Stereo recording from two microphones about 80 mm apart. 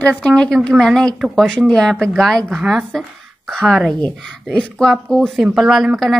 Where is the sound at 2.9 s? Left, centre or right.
Centre.